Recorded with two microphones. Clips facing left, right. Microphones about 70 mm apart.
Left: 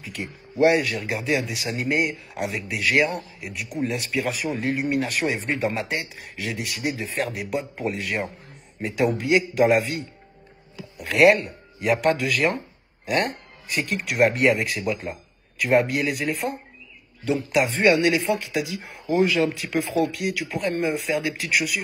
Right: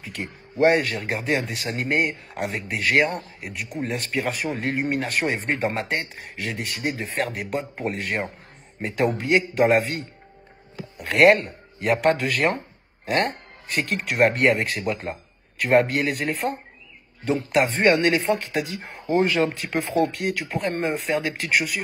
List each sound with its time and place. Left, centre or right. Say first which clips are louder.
0.0 s speech: even; right
11.1 s speech: right 1 dB; right
14.4 s speech: even; centre
14.7 s speech: even; right